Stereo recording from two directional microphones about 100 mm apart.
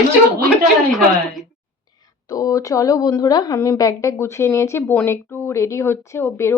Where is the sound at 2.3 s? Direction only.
35° left (ahead or behind).